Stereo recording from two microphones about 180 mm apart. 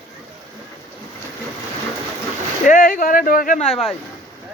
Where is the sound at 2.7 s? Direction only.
50° left (ahead or behind).